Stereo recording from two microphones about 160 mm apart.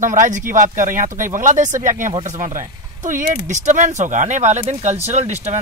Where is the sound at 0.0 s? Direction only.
55° right (ahead or behind).